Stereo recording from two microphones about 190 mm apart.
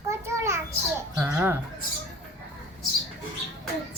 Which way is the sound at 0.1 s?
15° right (ahead or behind).